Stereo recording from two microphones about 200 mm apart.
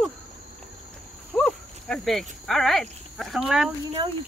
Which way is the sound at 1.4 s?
5° left (ahead or behind).